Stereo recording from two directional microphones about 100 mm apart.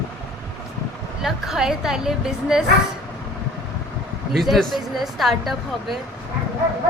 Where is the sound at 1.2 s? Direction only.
5° right (ahead or behind).